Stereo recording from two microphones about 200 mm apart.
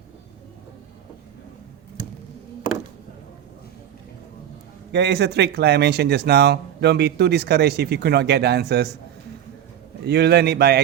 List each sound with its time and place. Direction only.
4.9 s speech: 55° right (ahead or behind)
10.0 s speech: 55° right (ahead or behind)